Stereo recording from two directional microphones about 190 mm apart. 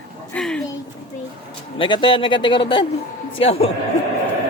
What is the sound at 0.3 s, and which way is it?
Speech, 5° left (ahead or behind).